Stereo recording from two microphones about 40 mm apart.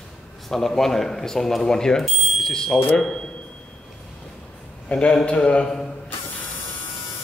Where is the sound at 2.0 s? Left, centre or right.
Centre.